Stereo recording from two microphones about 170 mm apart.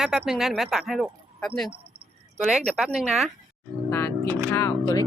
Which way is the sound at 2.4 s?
Centre (ahead or behind).